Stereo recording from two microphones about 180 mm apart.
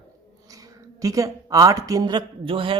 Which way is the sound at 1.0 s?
20° right (ahead or behind).